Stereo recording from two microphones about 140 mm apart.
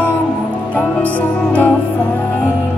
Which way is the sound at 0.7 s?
10° left (ahead or behind).